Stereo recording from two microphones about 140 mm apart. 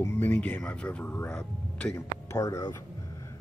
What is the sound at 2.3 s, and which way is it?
Speech, 20° left (ahead or behind).